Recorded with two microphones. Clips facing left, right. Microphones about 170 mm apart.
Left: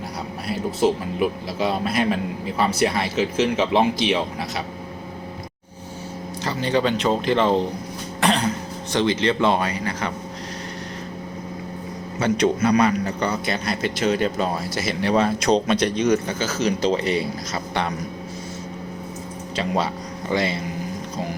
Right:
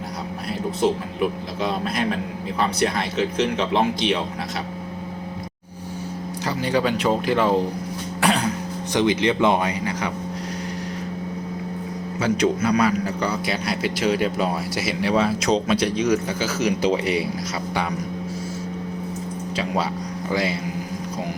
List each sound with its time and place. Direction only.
0.8 s speech: 5° left (ahead or behind)
6.4 s speech: 10° right (ahead or behind)
12.2 s speech: 5° right (ahead or behind)
19.5 s speech: 5° right (ahead or behind)